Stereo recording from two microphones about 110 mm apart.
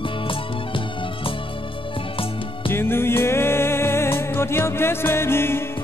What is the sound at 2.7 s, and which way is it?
Music, 20° left (ahead or behind).